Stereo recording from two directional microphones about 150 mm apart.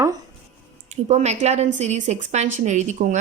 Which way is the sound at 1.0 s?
50° right (ahead or behind).